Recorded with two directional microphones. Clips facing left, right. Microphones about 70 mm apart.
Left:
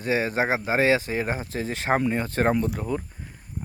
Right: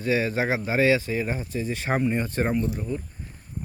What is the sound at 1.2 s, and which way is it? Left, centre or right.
Speech, left.